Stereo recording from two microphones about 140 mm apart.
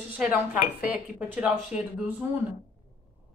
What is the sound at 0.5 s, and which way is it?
Speech, 90° left.